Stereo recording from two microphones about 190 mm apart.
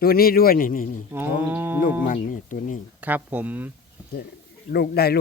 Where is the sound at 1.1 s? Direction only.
10° right (ahead or behind).